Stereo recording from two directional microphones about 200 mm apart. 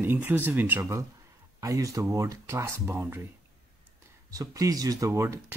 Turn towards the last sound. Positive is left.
turn(degrees=-15)  # may be behind; listen again after turning